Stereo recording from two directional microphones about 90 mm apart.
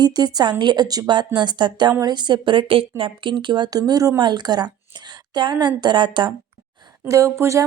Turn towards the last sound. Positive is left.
turn(degrees=-30)  # may be behind; listen again after turning